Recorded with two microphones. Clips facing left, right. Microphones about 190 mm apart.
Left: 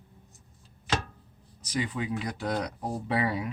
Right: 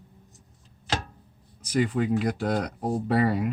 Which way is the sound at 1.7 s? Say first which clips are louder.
Right 7 dB; 50° right (ahead or behind).